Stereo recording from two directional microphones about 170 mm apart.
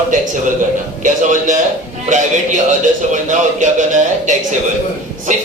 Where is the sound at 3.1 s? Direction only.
45° right (ahead or behind).